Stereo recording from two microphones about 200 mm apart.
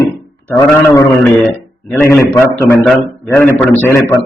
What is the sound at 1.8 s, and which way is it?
A man's voice, 10° left (ahead or behind).